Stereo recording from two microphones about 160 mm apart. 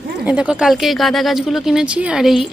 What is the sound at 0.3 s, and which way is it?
Speech, 5° right (ahead or behind).